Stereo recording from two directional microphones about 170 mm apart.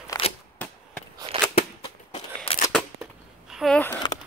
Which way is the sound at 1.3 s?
35° right (ahead or behind).